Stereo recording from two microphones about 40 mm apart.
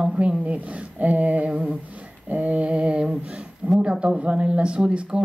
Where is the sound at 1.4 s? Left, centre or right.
Right.